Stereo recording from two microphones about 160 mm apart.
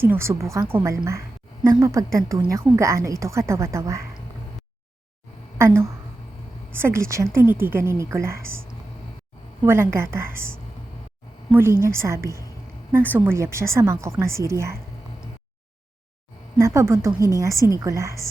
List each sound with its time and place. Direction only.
0.0 s a woman's voice: 15° right (ahead or behind)
5.5 s a woman's voice: 15° right (ahead or behind)
9.6 s a woman's voice: 15° right (ahead or behind)
11.5 s a woman's voice: 15° right (ahead or behind)
16.6 s a woman's voice: 20° right (ahead or behind)